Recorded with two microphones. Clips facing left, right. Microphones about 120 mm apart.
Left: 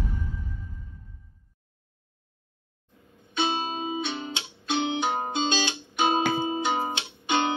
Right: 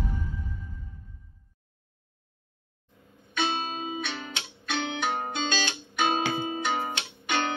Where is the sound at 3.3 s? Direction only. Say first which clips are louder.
Left 2 dB; 20° left (ahead or behind).